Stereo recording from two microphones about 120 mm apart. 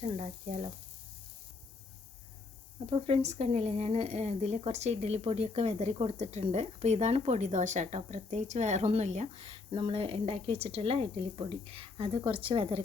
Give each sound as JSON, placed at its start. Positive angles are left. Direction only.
{"t": 2.9, "sound": "speech", "side_deg": -60}
{"t": 9.7, "sound": "speech", "side_deg": -45}